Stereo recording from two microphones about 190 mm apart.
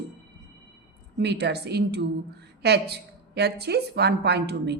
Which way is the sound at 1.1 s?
60° right (ahead or behind).